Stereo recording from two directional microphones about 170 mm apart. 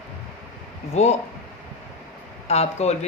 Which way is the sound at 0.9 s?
40° left (ahead or behind).